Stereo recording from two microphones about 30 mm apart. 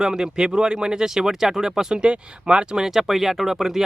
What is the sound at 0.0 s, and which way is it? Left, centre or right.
Speech, right.